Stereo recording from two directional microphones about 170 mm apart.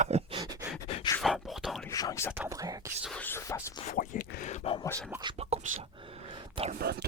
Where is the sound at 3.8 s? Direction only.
55° left (ahead or behind).